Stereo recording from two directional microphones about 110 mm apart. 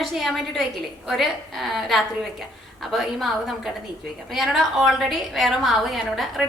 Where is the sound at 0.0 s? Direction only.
Centre (ahead or behind).